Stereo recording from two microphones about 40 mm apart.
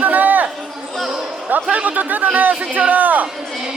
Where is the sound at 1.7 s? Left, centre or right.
Right.